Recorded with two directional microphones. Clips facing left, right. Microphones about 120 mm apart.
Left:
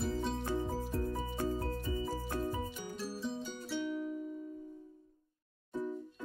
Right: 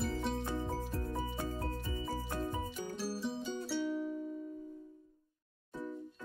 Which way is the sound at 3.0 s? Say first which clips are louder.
Even; 5° right (ahead or behind).